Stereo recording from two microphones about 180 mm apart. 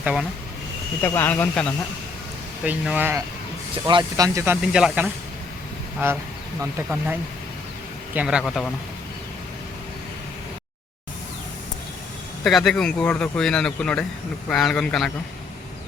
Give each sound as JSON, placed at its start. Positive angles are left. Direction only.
{"t": 0.0, "sound": "speech", "side_deg": -5}
{"t": 1.0, "sound": "speech", "side_deg": 10}
{"t": 2.6, "sound": "speech", "side_deg": -10}
{"t": 4.6, "sound": "speech", "side_deg": -5}
{"t": 8.1, "sound": "speech", "side_deg": -5}
{"t": 12.4, "sound": "speech", "side_deg": 0}